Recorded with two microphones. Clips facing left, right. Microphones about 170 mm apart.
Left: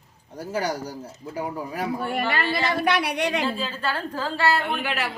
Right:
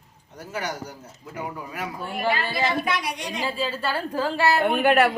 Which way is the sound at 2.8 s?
65° left (ahead or behind).